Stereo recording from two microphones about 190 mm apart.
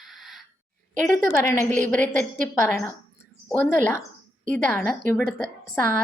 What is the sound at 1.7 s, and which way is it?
Speech, 45° right (ahead or behind).